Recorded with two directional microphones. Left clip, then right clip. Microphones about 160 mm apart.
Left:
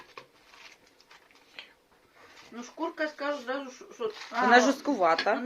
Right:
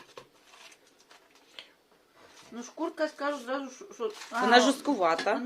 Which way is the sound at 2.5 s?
20° right (ahead or behind).